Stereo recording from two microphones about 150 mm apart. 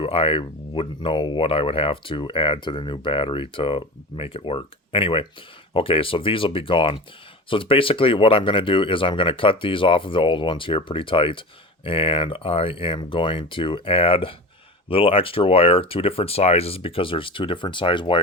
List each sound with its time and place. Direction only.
0.0 s speech: 40° left (ahead or behind)